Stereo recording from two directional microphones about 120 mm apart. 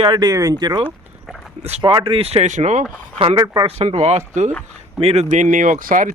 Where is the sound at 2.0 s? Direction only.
50° right (ahead or behind); by 2.8 s 90° right.